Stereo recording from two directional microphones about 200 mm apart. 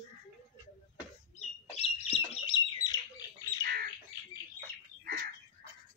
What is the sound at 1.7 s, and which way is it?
Bird, 30° left (ahead or behind).